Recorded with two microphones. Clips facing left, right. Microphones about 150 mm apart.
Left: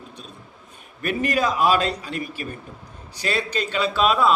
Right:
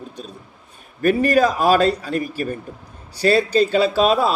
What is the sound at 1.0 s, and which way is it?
A man's voice, 40° right (ahead or behind).